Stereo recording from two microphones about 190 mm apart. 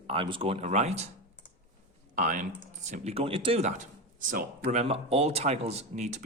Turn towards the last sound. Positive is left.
turn(degrees=-35)  # may be behind; listen again after turning